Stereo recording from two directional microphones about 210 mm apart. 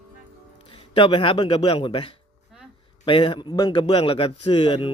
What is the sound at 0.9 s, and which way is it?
A man's voice, 25° left (ahead or behind).